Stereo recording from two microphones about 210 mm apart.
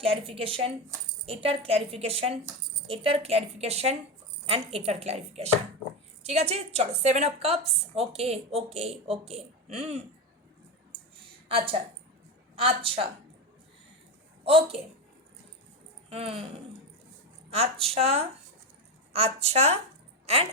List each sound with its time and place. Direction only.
0.0 s a woman's voice: 25° right (ahead or behind)
11.4 s a woman's voice: 25° right (ahead or behind)
14.4 s a woman's voice: 25° right (ahead or behind)
16.0 s speech: 30° right (ahead or behind)
17.5 s a woman's voice: 30° right (ahead or behind)